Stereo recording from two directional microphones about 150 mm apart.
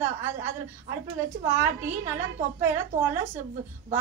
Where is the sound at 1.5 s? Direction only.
20° right (ahead or behind).